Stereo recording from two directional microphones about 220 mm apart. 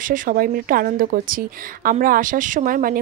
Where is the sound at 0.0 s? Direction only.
40° right (ahead or behind).